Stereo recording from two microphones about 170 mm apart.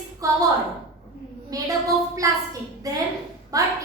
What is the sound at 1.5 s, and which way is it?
A woman's voice, 20° right (ahead or behind).